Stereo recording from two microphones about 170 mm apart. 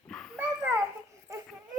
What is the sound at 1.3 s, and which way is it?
Baby cry, 20° right (ahead or behind).